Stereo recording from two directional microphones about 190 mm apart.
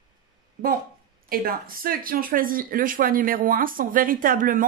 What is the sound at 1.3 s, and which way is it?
Speech, 50° right (ahead or behind).